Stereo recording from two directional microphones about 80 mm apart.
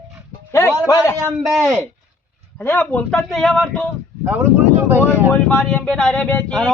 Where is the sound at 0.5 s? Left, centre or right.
Left.